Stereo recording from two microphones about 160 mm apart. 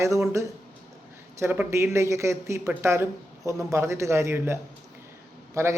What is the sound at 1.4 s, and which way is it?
Speech, 15° right (ahead or behind).